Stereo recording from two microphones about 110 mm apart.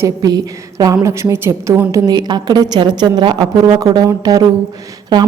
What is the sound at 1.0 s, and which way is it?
A woman's voice, 25° right (ahead or behind).